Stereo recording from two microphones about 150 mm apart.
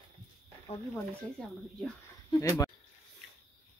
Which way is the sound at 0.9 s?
5° left (ahead or behind).